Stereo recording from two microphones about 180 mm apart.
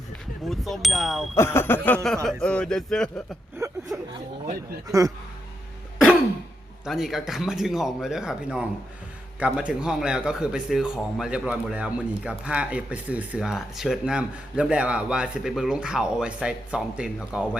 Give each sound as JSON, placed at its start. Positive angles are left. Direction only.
{"t": 0.4, "sound": "speech", "side_deg": 0}
{"t": 1.4, "sound": "a sound", "side_deg": 15}
{"t": 2.2, "sound": "speech", "side_deg": 5}
{"t": 3.6, "sound": "a sound", "side_deg": -20}
{"t": 4.9, "sound": "speech", "side_deg": -20}
{"t": 6.8, "sound": "speech", "side_deg": 0}